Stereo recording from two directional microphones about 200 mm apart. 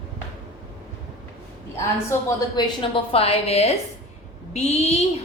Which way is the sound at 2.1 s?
20° left (ahead or behind).